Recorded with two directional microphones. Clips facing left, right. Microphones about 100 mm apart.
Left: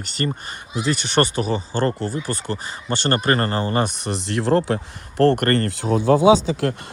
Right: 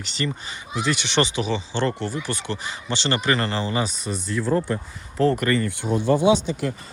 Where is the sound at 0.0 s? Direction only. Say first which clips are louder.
Left 3 dB; 45° left (ahead or behind).